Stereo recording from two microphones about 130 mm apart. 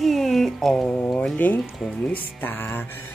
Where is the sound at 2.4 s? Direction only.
15° left (ahead or behind).